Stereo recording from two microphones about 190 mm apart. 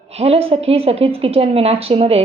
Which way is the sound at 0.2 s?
30° right (ahead or behind).